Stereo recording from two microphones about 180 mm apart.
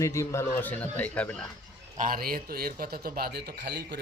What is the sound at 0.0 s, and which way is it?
A man's voice, 15° left (ahead or behind).